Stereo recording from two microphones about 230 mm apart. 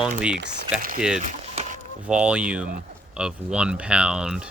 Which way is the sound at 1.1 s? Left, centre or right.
Right.